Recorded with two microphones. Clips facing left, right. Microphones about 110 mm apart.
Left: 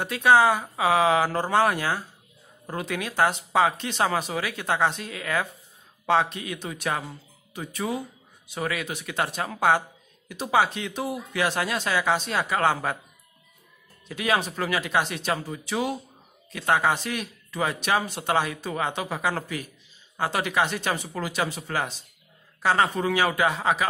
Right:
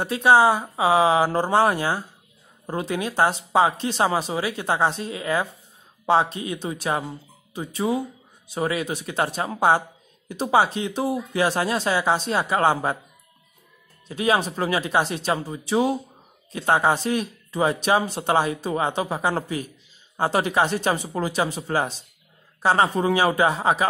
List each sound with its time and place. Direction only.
0.0 s speech: 25° right (ahead or behind)
14.0 s speech: 30° right (ahead or behind)